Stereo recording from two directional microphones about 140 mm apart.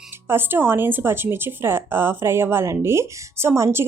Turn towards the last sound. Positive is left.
turn(degrees=-20)  # may be behind; listen again after turning